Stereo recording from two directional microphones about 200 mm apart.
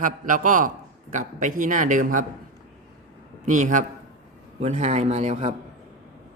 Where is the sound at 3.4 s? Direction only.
40° right (ahead or behind).